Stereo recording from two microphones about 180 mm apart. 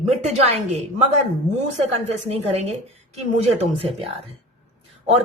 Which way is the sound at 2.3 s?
35° right (ahead or behind).